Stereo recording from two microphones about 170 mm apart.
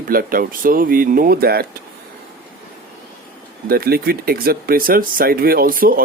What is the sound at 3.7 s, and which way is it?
Speech, 65° right (ahead or behind).